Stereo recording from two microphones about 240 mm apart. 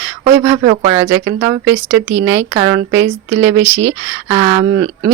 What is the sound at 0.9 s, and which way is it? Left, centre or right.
Speech, centre.